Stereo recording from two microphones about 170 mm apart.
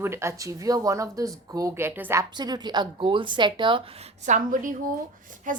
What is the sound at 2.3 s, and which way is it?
Speech, 25° right (ahead or behind).